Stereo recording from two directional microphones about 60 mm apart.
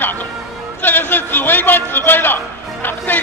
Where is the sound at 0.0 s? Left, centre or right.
Left.